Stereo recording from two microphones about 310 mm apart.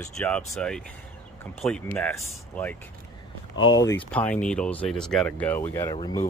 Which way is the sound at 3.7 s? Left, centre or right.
Centre.